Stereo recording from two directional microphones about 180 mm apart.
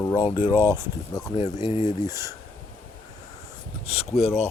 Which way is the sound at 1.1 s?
25° left (ahead or behind).